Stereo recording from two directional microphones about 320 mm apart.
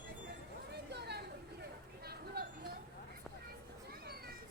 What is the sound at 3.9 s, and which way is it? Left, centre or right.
Cat, right.